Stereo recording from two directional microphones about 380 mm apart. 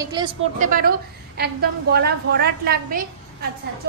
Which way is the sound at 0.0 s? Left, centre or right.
Centre.